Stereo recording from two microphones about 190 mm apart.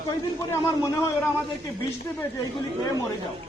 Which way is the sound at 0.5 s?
15° left (ahead or behind).